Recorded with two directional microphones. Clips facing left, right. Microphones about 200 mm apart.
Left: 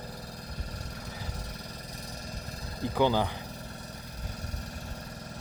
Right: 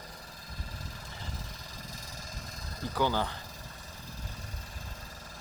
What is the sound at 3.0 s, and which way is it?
Speech, 15° left (ahead or behind).